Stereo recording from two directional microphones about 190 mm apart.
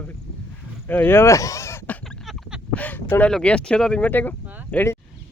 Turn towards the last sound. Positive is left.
turn(degrees=10)  # may be behind; listen again after turning